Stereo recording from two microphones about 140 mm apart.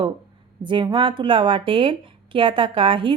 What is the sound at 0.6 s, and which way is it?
Speech, 35° right (ahead or behind).